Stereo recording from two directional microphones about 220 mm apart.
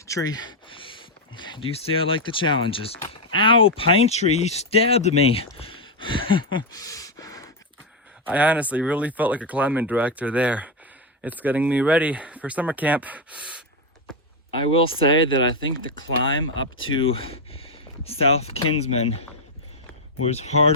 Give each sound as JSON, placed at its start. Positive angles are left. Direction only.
{"t": 0.1, "sound": "speech", "side_deg": 15}
{"t": 8.2, "sound": "speech", "side_deg": -5}
{"t": 14.5, "sound": "speech", "side_deg": 25}
{"t": 15.6, "sound": "speech", "side_deg": 60}
{"t": 17.1, "sound": "speech", "side_deg": 25}